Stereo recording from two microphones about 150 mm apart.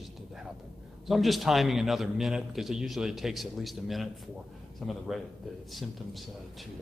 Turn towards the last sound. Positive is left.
turn(degrees=0)  # may be behind; listen again after turning